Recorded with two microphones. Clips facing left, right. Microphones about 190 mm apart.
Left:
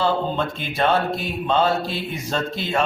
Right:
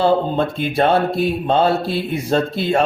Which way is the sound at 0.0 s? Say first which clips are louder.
Right 5 dB; 50° right (ahead or behind).